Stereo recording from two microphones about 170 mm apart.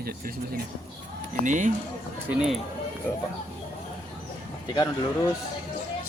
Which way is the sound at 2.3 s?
5° right (ahead or behind).